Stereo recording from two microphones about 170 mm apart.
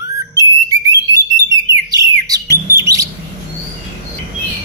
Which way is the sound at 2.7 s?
20° right (ahead or behind).